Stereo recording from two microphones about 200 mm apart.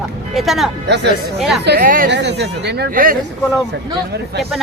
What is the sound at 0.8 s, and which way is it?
Speech, 60° right (ahead or behind).